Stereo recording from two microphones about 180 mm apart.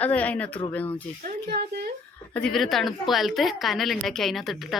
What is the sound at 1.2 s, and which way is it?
Speech, 60° right (ahead or behind).